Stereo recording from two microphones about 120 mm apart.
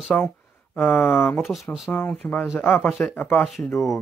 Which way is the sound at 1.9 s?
15° left (ahead or behind).